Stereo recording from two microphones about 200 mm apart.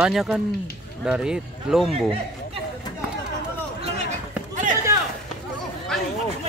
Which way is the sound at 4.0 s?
35° right (ahead or behind).